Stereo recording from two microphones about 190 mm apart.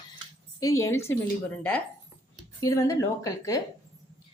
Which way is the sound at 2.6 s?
15° left (ahead or behind).